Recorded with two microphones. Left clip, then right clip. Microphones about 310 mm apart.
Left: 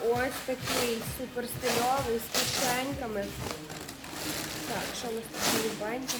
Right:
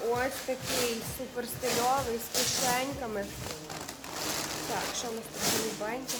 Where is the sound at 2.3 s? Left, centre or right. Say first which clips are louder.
Even; left.